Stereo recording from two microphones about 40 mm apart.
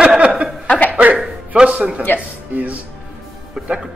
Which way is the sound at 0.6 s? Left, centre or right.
Left.